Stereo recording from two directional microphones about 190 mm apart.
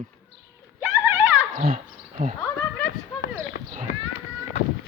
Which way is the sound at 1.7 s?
40° right (ahead or behind).